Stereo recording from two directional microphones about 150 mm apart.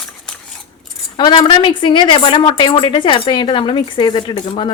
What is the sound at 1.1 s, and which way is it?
A woman's voice, 30° left (ahead or behind).